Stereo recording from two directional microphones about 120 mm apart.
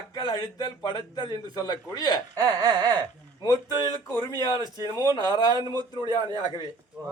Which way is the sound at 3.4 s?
35° left (ahead or behind).